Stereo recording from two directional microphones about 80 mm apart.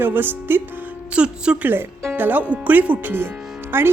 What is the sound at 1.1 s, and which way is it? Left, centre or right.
A woman's voice, centre.